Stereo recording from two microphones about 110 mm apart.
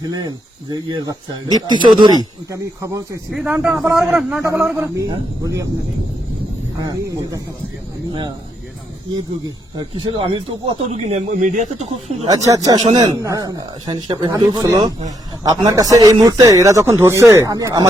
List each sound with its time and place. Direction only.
0.1 s speech: 35° right (ahead or behind)
2.5 s speech: 30° right (ahead or behind)
3.3 s a man's voice: 10° right (ahead or behind)
5.4 s speech: 30° right (ahead or behind)
6.8 s speech: 30° right (ahead or behind)
9.9 s speech: 45° right (ahead or behind)
10.8 s speech: 80° right
12.3 s speech: 30° right (ahead or behind)
12.9 s speech: 45° right (ahead or behind)
13.2 s speech: 30° right (ahead or behind)